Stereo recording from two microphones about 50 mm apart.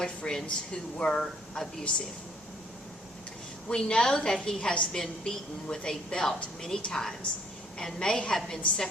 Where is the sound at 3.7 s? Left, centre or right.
Centre.